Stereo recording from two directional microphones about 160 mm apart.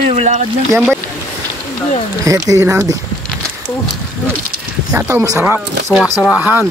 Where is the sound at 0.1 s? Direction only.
45° right (ahead or behind).